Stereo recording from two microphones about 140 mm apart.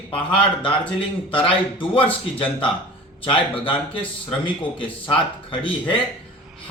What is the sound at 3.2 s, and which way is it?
Speech, 40° left (ahead or behind).